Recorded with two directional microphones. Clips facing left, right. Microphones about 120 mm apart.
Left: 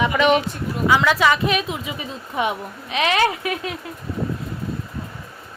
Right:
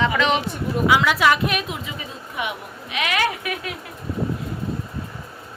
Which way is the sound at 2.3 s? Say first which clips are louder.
Left 6 dB; 30° left (ahead or behind).